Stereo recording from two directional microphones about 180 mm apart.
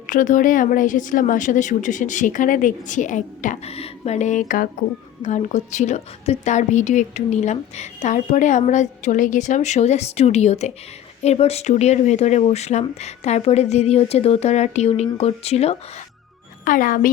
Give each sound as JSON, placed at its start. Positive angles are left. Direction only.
{"t": 0.1, "sound": "a woman's voice", "side_deg": 45}
{"t": 16.6, "sound": "speech", "side_deg": 50}